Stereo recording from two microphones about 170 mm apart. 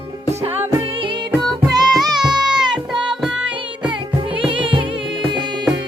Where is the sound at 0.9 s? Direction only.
30° right (ahead or behind).